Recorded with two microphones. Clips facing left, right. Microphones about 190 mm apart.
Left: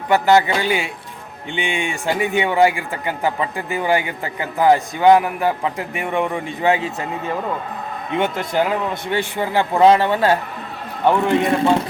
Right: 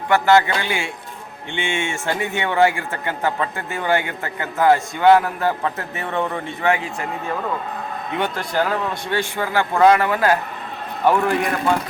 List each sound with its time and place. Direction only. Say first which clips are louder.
0.1 s a man's voice: left 1 dB; 20° left (ahead or behind)
8.1 s a man's voice: left 3 dB; 20° left (ahead or behind)